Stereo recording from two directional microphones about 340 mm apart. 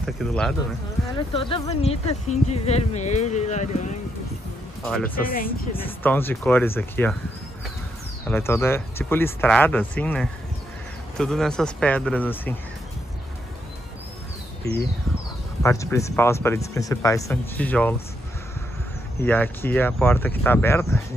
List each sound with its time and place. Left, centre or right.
0.0 s speech: centre
1.1 s speech: centre
4.8 s speech: centre
5.2 s speech: left
5.8 s speech: centre
8.3 s speech: centre
15.6 s speech: centre
19.1 s speech: centre